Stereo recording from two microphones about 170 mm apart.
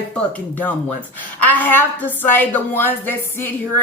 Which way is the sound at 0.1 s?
10° left (ahead or behind).